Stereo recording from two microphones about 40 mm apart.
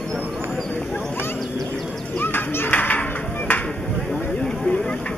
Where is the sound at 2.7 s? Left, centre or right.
Left.